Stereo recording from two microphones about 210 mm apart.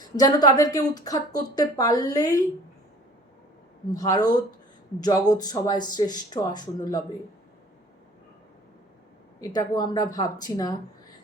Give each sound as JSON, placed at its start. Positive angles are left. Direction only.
{"t": 0.0, "sound": "speech", "side_deg": 20}
{"t": 3.9, "sound": "speech", "side_deg": 15}
{"t": 9.4, "sound": "speech", "side_deg": 20}